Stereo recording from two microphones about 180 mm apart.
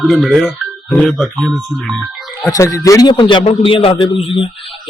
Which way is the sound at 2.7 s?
15° left (ahead or behind).